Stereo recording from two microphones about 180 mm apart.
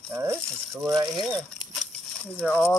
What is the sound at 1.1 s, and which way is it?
Speech, centre (ahead or behind).